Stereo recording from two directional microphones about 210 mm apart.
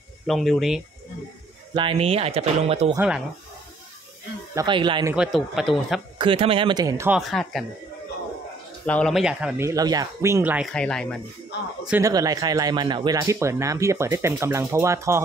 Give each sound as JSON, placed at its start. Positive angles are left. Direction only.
{"t": 0.3, "sound": "speech", "side_deg": 0}
{"t": 1.7, "sound": "speech", "side_deg": -25}
{"t": 2.9, "sound": "speech", "side_deg": -10}
{"t": 4.6, "sound": "speech", "side_deg": -20}
{"t": 5.1, "sound": "speech", "side_deg": 0}
{"t": 6.1, "sound": "speech", "side_deg": -25}
{"t": 7.2, "sound": "speech", "side_deg": 0}
{"t": 8.8, "sound": "speech", "side_deg": 5}
{"t": 10.7, "sound": "speech", "side_deg": 5}
{"t": 12.0, "sound": "speech", "side_deg": -15}